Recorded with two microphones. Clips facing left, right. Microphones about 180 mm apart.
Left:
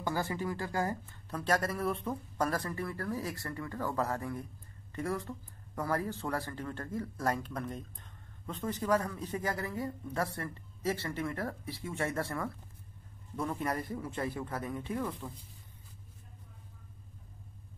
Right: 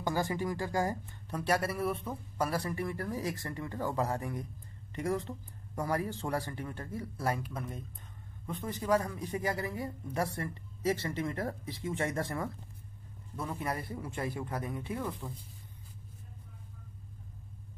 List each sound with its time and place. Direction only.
0.0 s speech: 15° right (ahead or behind)
13.4 s speech: 5° right (ahead or behind)